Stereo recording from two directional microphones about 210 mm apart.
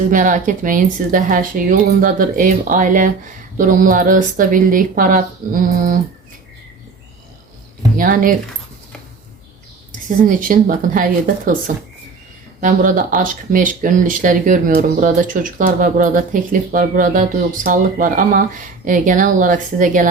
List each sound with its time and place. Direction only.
0.1 s speech: 40° right (ahead or behind)
7.9 s speech: 40° right (ahead or behind)
10.2 s speech: 40° right (ahead or behind)
12.5 s speech: 40° right (ahead or behind)